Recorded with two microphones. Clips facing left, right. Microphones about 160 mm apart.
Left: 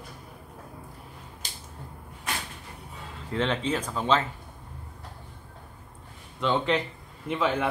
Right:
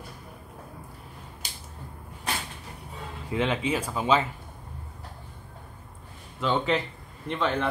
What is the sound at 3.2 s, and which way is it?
Speech, 10° right (ahead or behind).